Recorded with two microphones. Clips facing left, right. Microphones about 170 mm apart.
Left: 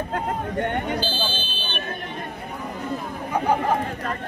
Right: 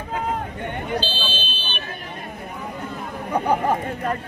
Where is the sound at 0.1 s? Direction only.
65° left (ahead or behind).